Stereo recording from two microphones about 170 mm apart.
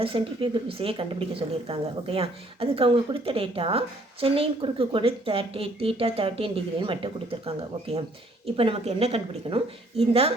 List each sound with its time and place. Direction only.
0.0 s speech: 30° right (ahead or behind)